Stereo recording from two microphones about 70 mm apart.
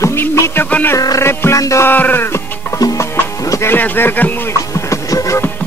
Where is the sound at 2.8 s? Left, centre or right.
Left.